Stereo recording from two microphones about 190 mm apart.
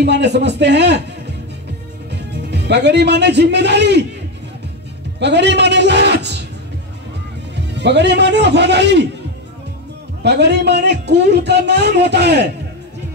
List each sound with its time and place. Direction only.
0.0 s a man's voice: 65° right (ahead or behind)
2.0 s speech: 65° right (ahead or behind)
5.2 s a man's voice: 65° right (ahead or behind)
7.5 s a man's voice: 65° right (ahead or behind)
10.2 s a man's voice: 65° right (ahead or behind)